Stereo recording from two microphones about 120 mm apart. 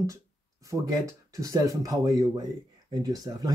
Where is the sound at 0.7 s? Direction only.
25° right (ahead or behind).